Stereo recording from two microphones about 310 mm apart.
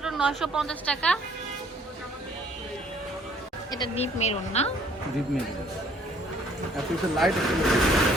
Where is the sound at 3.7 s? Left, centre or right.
Centre.